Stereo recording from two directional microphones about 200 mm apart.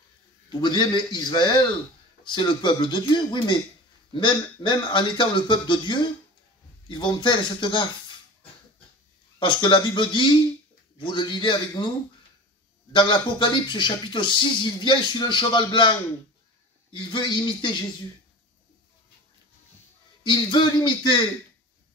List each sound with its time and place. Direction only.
0.5 s speech: 20° left (ahead or behind)
9.4 s speech: 25° left (ahead or behind)
12.9 s speech: 25° left (ahead or behind)
20.2 s speech: 25° left (ahead or behind)